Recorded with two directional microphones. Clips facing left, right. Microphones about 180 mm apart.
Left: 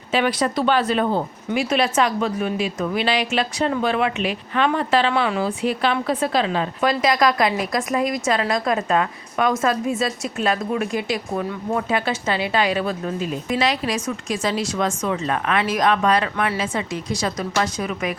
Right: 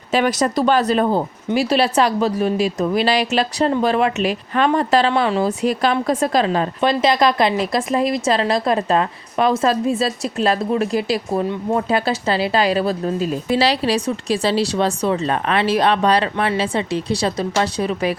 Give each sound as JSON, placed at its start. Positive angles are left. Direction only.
{"t": 0.1, "sound": "a woman's voice", "side_deg": -40}
{"t": 6.8, "sound": "a woman's voice", "side_deg": -25}